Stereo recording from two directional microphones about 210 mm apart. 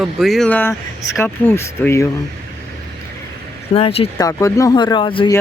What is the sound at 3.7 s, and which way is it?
Speech, 30° left (ahead or behind).